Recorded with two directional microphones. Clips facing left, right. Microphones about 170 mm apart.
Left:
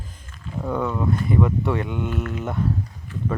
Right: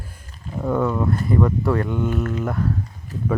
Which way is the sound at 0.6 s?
5° right (ahead or behind).